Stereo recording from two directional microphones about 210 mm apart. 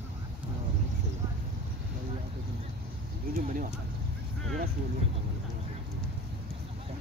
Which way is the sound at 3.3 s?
40° right (ahead or behind).